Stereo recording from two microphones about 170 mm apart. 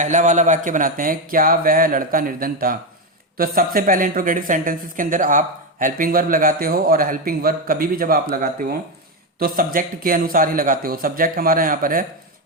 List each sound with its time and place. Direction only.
0.0 s speech: 45° right (ahead or behind)